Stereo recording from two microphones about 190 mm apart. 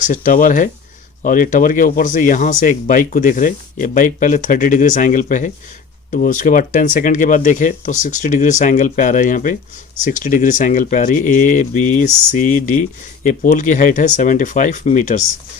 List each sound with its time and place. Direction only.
0.1 s speech: 45° left (ahead or behind)